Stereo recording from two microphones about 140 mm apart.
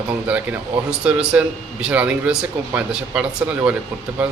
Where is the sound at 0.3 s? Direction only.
10° right (ahead or behind).